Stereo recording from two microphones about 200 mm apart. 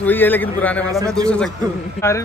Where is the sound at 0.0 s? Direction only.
10° left (ahead or behind).